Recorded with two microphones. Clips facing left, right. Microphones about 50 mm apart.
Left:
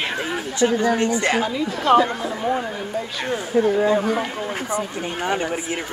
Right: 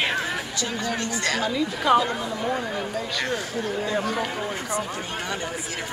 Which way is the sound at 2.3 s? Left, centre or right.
Centre.